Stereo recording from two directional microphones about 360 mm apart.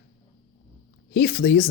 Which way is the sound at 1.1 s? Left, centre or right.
Left.